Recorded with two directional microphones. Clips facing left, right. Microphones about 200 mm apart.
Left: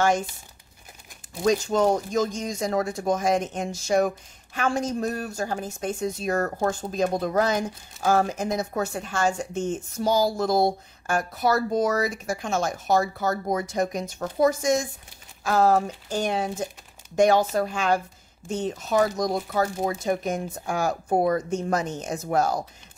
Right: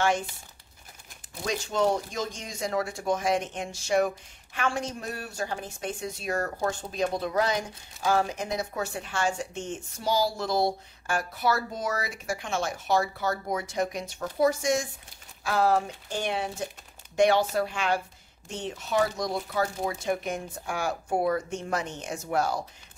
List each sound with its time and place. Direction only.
1.4 s speech: 45° left (ahead or behind)